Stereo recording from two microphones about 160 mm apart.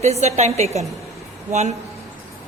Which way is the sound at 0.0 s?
45° right (ahead or behind).